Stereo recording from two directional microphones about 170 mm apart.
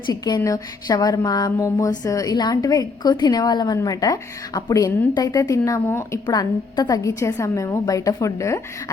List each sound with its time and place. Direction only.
0.1 s speech: 25° left (ahead or behind)